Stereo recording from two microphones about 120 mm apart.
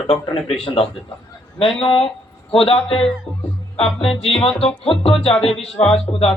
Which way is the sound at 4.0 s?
50° left (ahead or behind).